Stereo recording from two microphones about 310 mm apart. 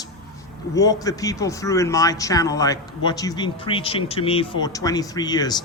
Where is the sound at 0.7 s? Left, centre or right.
Centre.